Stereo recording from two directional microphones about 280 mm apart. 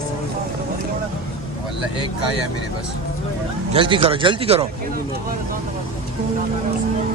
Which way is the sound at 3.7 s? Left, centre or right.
Centre.